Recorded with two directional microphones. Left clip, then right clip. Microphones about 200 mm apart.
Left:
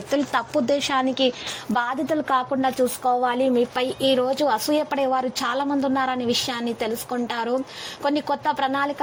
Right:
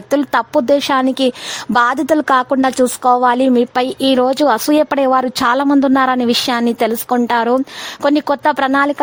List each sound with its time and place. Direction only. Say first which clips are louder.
0.1 s a woman's voice: right 8 dB; 40° right (ahead or behind)